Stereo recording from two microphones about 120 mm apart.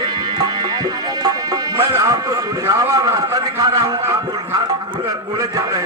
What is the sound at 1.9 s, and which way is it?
A man's voice, 25° right (ahead or behind).